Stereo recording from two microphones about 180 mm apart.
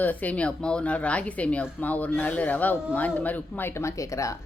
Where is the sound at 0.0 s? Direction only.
10° left (ahead or behind).